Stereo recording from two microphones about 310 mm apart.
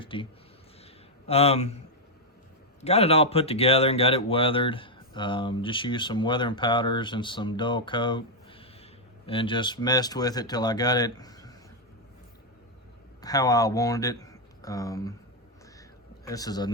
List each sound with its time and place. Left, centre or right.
0.0 s a sound: centre
1.3 s speech: centre
2.8 s speech: centre
13.2 s speech: centre
16.2 s speech: centre